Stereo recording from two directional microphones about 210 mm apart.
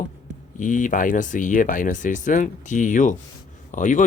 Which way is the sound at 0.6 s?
40° left (ahead or behind).